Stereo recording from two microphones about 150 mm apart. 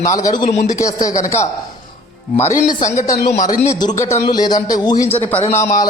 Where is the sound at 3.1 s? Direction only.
75° left (ahead or behind).